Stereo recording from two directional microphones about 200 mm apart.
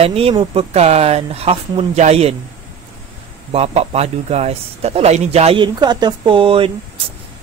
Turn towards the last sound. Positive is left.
turn(degrees=-25)  # may be behind; listen again after turning